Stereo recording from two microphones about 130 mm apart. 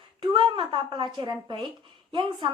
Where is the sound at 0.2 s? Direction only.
35° right (ahead or behind).